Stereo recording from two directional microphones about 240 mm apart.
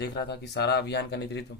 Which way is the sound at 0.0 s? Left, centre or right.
Left.